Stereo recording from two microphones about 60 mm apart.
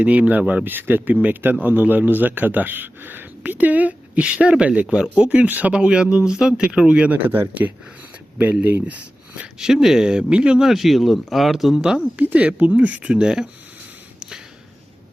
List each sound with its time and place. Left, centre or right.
0.0 s speech: right
1.1 s speech: right
7.3 s speech: right
8.9 s speech: right
9.6 s speech: centre
10.7 s speech: centre
12.1 s speech: right
14.2 s a sound: centre